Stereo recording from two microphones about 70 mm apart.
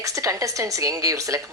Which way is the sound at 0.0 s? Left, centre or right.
Right.